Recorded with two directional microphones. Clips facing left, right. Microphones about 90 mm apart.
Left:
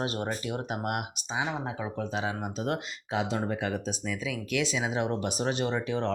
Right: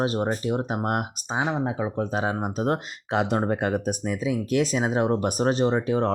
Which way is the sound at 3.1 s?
60° right (ahead or behind).